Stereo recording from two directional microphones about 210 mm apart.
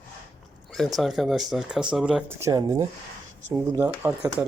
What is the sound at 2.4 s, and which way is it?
Speech, 15° right (ahead or behind).